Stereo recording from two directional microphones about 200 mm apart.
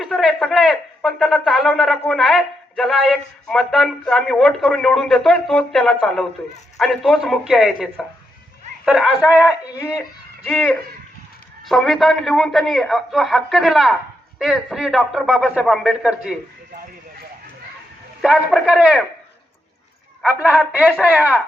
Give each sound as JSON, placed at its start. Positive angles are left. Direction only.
{"t": 0.0, "sound": "speech", "side_deg": 0}
{"t": 18.2, "sound": "speech", "side_deg": 0}
{"t": 20.2, "sound": "speech", "side_deg": -5}